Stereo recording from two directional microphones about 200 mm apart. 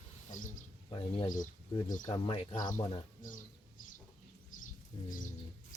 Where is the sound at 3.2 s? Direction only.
40° left (ahead or behind).